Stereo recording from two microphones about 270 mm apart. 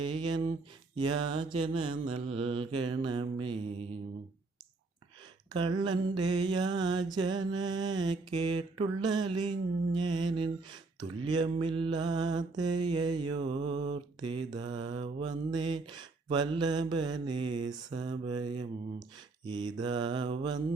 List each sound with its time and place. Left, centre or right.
0.0 s mantra: centre
5.5 s mantra: centre
19.5 s mantra: centre